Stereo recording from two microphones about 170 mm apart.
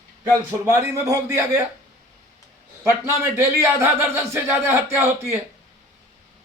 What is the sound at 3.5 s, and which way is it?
Speech, 15° right (ahead or behind).